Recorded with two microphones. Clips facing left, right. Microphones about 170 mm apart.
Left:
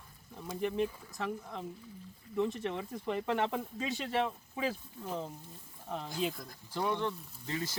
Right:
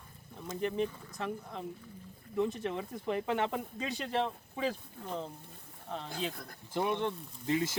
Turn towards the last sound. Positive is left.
turn(degrees=-20)  # may be behind; listen again after turning